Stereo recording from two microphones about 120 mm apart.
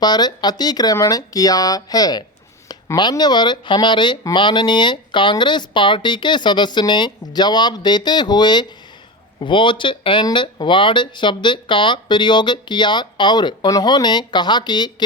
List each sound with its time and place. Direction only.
0.0 s speech: 35° left (ahead or behind)